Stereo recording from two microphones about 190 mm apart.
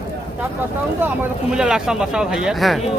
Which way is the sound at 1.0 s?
5° right (ahead or behind).